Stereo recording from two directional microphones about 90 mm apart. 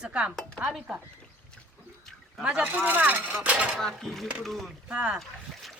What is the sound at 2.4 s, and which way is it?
Speech, 15° right (ahead or behind).